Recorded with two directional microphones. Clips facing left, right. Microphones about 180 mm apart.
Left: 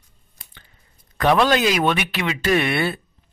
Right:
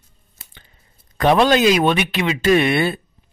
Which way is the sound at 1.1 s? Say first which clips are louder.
Right 3 dB; 20° right (ahead or behind).